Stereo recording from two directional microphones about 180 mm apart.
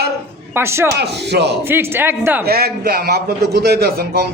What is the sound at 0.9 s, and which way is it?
Speech, 65° right (ahead or behind).